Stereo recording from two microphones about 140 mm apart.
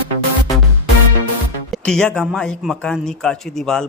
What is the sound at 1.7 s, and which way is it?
A man's voice, 5° left (ahead or behind).